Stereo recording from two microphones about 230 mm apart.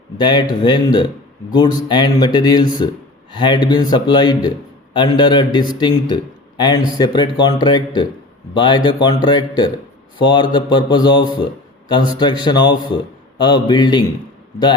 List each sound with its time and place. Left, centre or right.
0.2 s speech: centre